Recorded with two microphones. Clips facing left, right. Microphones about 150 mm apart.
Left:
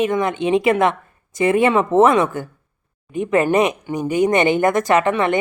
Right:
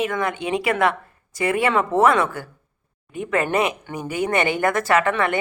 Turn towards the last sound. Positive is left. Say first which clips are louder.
# left 3 dB
turn(degrees=20)  # may be behind; listen again after turning